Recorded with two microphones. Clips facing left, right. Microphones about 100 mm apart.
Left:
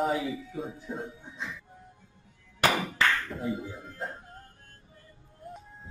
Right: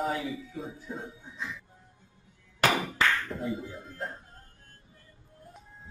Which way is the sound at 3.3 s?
Centre (ahead or behind).